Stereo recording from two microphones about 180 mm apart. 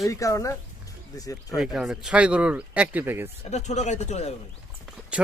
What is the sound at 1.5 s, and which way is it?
Speech, centre (ahead or behind).